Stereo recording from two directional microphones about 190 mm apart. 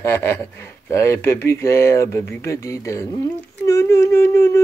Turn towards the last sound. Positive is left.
turn(degrees=15)  # may be behind; listen again after turning